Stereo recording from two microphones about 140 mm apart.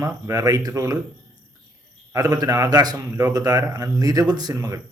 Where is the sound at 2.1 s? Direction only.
25° right (ahead or behind).